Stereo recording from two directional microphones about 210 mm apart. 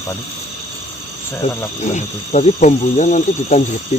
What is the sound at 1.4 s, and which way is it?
Speech, 30° left (ahead or behind).